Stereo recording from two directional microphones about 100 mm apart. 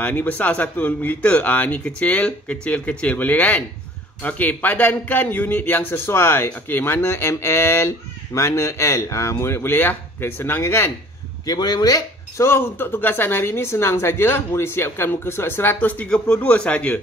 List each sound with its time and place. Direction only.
0.0 s a man's voice: 15° left (ahead or behind)
11.4 s speech: 40° left (ahead or behind)
12.4 s speech: 25° left (ahead or behind)